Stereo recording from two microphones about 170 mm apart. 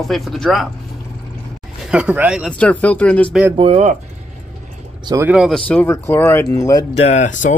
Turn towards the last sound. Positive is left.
turn(degrees=45)  # may be behind; listen again after turning